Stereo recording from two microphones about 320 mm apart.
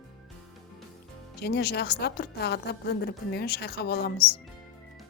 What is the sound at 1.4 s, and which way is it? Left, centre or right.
A woman's voice, left.